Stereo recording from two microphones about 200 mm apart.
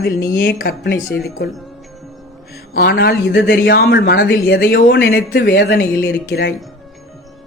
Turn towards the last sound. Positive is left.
turn(degrees=55)  # may be behind; listen again after turning